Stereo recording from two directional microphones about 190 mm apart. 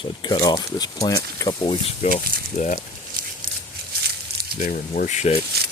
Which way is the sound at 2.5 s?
40° left (ahead or behind).